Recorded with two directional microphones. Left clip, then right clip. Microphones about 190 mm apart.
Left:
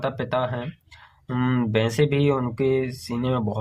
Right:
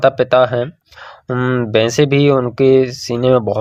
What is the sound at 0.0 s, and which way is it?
Speech, 35° right (ahead or behind).